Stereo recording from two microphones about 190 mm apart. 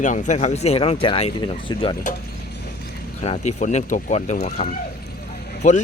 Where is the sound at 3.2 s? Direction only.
35° left (ahead or behind).